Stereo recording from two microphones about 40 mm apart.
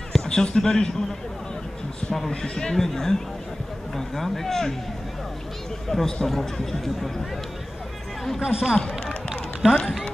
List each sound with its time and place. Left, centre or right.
0.1 s speech: centre
2.4 s speech: centre
5.9 s speech: centre
8.4 s speech: centre
8.7 s speech: left
9.3 s run: centre